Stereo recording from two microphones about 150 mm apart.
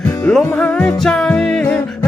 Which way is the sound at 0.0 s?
10° left (ahead or behind).